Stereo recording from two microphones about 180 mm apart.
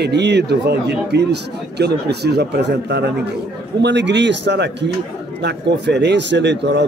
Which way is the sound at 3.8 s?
75° right (ahead or behind).